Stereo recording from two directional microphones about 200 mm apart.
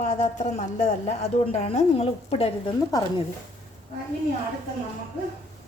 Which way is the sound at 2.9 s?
20° left (ahead or behind).